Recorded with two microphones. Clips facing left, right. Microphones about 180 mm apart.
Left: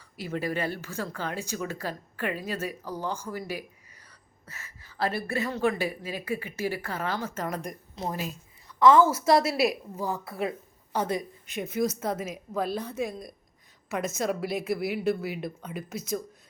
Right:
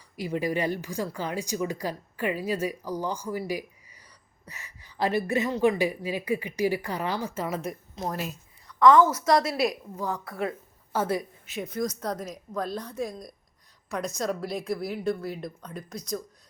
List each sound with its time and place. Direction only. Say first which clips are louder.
0.2 s speech: right 3 dB; 15° right (ahead or behind)
7.9 s a woman's voice: even; 10° left (ahead or behind)
8.6 s a sound: right 1 dB; 25° left (ahead or behind)
9.2 s a woman's voice: left 1 dB; 5° left (ahead or behind)
11.0 s a woman's voice: right 2 dB; 5° right (ahead or behind)